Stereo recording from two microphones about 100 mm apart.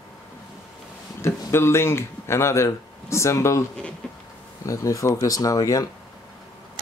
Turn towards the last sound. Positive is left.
turn(degrees=35)  # may be behind; listen again after turning